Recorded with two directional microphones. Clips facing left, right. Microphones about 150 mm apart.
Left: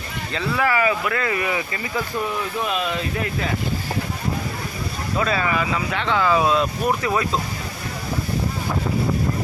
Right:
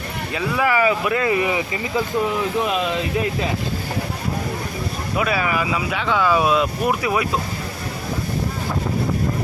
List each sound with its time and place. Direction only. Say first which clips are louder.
0.3 s speech: right 2 dB; 15° right (ahead or behind)
5.1 s speech: right 1 dB; 10° right (ahead or behind)